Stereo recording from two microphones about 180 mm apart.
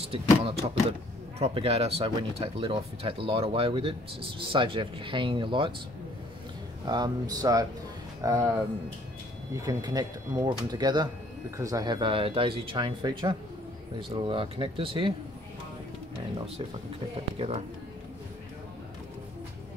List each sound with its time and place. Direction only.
0.1 s speech: 30° right (ahead or behind)
6.9 s speech: 20° right (ahead or behind)
9.6 s speech: 20° right (ahead or behind)